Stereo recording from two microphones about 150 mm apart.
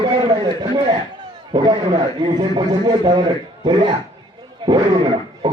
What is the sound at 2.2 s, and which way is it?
A man's voice, 30° right (ahead or behind).